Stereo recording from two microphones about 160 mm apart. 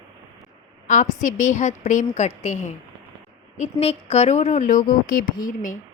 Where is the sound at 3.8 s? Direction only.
40° left (ahead or behind).